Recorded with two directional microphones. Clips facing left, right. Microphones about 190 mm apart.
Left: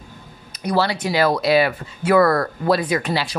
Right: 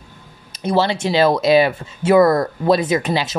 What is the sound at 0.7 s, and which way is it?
Speech, 25° right (ahead or behind).